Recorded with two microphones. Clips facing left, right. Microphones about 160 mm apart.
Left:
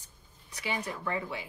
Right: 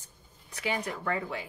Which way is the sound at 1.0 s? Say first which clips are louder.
Right 2 dB; 55° right (ahead or behind).